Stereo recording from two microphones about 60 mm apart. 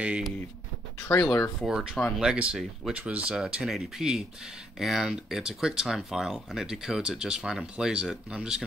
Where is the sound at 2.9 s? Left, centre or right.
Right.